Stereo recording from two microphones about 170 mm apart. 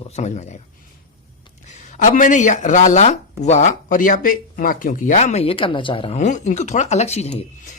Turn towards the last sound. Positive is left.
turn(degrees=40)  # may be behind; listen again after turning